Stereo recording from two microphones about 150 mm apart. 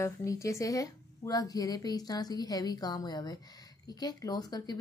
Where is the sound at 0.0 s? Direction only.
20° left (ahead or behind).